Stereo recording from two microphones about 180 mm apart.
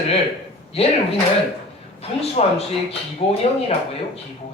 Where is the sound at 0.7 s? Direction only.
35° left (ahead or behind).